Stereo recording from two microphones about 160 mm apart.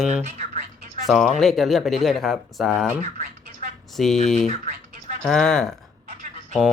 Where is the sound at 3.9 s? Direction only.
Centre (ahead or behind).